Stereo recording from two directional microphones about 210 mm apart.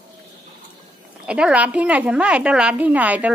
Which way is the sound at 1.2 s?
5° right (ahead or behind).